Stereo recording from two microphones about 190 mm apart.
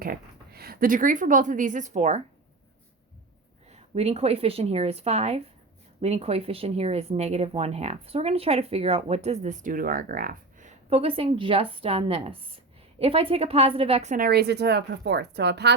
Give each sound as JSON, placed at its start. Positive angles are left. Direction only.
{"t": 0.0, "sound": "a woman's voice", "side_deg": -50}
{"t": 3.7, "sound": "speech", "side_deg": -35}
{"t": 14.3, "sound": "speech", "side_deg": -60}